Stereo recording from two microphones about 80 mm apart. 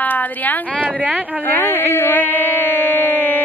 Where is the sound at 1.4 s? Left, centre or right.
Left.